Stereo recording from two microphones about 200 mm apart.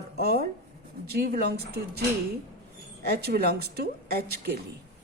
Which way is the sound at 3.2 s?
50° right (ahead or behind).